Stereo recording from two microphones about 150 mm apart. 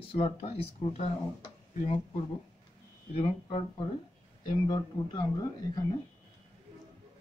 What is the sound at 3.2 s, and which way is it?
Speech, 40° left (ahead or behind).